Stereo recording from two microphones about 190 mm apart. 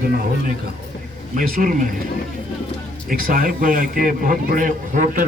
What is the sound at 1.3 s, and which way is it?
Speech, 45° right (ahead or behind).